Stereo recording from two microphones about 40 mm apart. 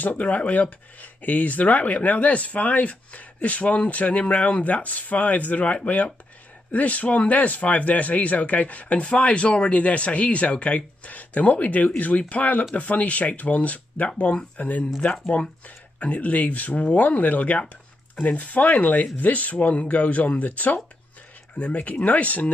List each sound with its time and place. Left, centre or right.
0.0 s speech: left
15.1 s speech: left